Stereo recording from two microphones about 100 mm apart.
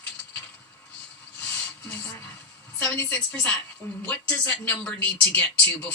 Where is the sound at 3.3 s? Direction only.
10° left (ahead or behind).